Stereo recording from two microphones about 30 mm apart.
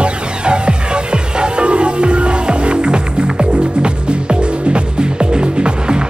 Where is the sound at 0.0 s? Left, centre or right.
Right.